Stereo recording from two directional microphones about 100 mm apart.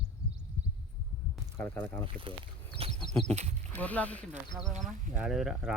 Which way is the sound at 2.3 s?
60° right (ahead or behind).